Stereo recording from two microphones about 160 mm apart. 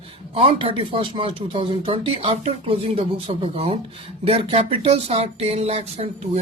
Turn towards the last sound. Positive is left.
turn(degrees=-40)  # may be behind; listen again after turning